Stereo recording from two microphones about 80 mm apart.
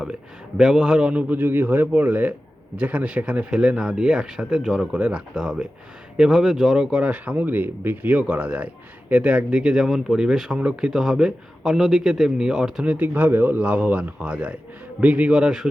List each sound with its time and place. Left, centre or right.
0.0 s a man's voice: centre
4.9 s speech: centre
12.8 s speech: centre